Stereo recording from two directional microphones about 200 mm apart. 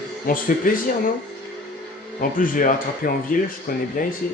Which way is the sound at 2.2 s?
45° left (ahead or behind).